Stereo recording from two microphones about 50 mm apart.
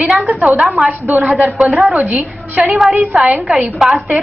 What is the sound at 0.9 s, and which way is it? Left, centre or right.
A woman's voice, right.